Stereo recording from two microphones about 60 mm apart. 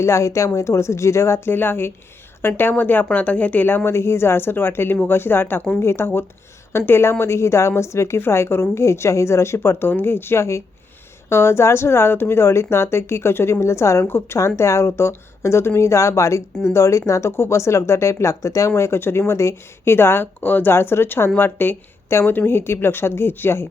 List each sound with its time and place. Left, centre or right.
0.0 s speech: left
1.5 s a woman's voice: left
14.0 s speech: left
18.8 s a woman's voice: left
22.1 s a woman's voice: left